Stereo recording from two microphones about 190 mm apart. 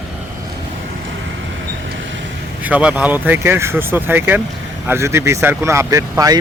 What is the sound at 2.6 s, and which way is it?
A man's voice, 10° right (ahead or behind).